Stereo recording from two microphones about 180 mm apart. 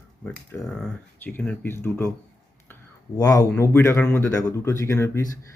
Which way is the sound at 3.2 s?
20° left (ahead or behind).